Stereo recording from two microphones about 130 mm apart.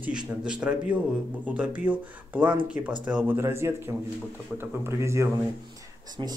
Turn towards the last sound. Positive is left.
turn(degrees=-40)  # may be behind; listen again after turning